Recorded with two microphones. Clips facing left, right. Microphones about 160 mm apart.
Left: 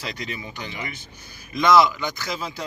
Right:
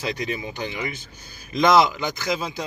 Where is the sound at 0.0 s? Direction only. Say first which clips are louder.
Right 5 dB; 25° right (ahead or behind).